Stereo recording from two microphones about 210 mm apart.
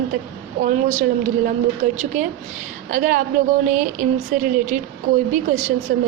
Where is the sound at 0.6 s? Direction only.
35° right (ahead or behind).